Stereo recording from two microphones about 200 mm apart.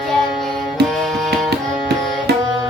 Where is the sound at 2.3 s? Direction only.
55° right (ahead or behind).